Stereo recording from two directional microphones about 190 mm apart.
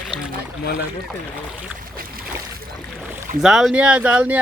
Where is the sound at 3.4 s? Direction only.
Centre (ahead or behind).